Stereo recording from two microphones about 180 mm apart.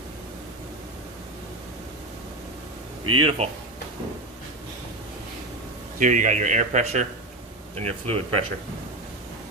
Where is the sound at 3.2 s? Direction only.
35° right (ahead or behind).